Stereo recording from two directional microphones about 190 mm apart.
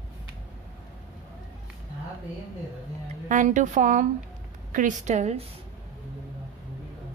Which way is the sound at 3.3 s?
40° right (ahead or behind).